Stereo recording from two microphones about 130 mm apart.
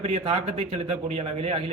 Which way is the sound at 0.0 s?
50° right (ahead or behind).